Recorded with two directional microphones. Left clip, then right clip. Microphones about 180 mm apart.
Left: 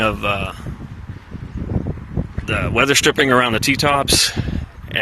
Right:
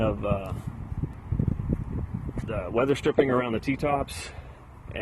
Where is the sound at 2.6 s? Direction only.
20° left (ahead or behind).